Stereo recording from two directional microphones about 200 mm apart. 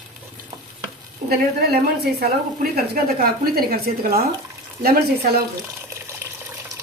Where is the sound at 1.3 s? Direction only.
50° right (ahead or behind).